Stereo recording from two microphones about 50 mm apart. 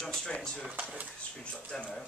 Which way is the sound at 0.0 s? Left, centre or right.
Centre.